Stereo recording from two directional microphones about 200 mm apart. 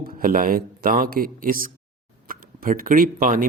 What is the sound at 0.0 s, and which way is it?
Speech, 45° right (ahead or behind).